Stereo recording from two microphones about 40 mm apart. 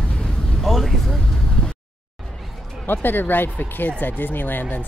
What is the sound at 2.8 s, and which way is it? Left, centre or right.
Speech, left.